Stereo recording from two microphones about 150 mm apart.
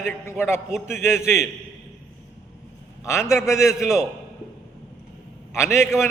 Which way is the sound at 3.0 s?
20° left (ahead or behind).